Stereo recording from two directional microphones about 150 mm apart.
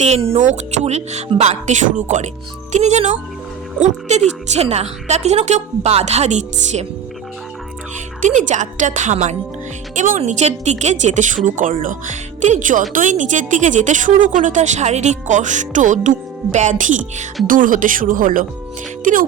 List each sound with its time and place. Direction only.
0.0 s a woman's voice: 45° right (ahead or behind)
8.2 s a woman's voice: 55° right (ahead or behind)